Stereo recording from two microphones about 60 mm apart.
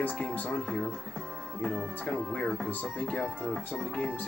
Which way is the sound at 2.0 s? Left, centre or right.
Left.